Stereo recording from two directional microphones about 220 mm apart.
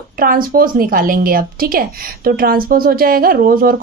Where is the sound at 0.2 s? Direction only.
40° right (ahead or behind).